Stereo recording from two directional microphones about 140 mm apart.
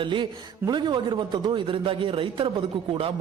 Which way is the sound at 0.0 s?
35° right (ahead or behind).